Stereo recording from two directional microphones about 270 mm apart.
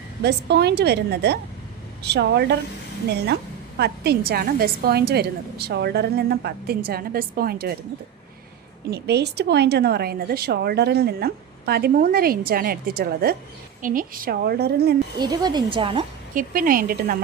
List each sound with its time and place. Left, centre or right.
0.2 s a woman's voice: right
3.8 s a woman's voice: right
8.9 s a woman's voice: right
13.8 s a woman's voice: right
15.2 s speech: centre
16.3 s a woman's voice: right